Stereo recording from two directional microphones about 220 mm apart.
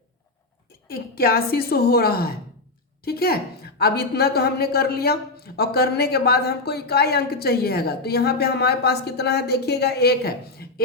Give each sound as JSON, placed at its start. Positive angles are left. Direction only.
{"t": 0.9, "sound": "a woman's voice", "side_deg": 45}